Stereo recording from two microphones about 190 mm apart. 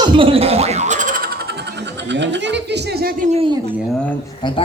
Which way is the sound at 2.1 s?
65° right (ahead or behind).